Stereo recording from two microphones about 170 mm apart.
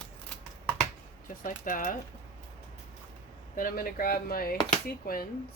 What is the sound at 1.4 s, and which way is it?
Speech, 55° left (ahead or behind).